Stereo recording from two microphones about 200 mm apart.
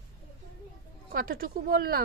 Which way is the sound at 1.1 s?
45° right (ahead or behind).